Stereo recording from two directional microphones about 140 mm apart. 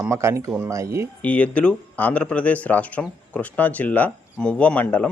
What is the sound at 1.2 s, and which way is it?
Speech, 10° left (ahead or behind).